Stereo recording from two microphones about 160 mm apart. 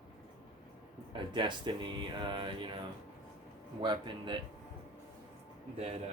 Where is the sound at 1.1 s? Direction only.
30° right (ahead or behind).